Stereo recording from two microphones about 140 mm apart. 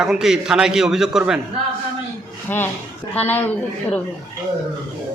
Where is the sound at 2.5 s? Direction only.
15° left (ahead or behind).